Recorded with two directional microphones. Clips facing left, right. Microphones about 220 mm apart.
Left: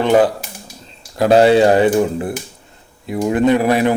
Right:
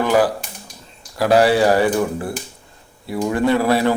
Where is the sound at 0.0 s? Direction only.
25° left (ahead or behind).